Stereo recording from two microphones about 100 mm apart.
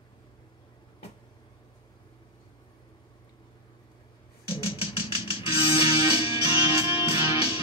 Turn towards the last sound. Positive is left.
turn(degrees=65)  # may be behind; listen again after turning